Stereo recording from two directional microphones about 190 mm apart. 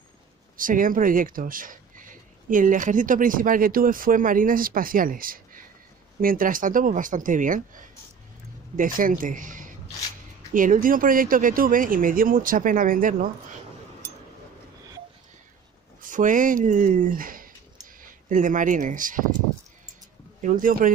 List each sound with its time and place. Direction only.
0.6 s speech: 45° right (ahead or behind)
16.0 s speech: 45° right (ahead or behind)
20.4 s speech: 45° right (ahead or behind)